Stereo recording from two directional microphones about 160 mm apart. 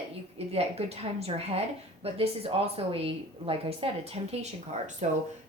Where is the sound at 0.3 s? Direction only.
40° right (ahead or behind).